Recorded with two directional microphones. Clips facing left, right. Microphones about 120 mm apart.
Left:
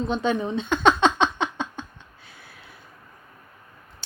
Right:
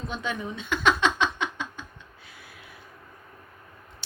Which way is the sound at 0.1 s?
30° left (ahead or behind).